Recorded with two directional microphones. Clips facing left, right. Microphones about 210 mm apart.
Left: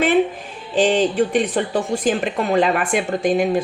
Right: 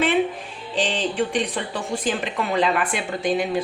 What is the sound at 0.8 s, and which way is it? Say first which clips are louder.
A woman's voice: left 7 dB; 45° left (ahead or behind).